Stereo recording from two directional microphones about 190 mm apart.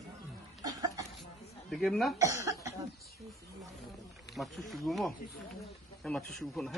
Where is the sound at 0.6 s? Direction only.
20° right (ahead or behind).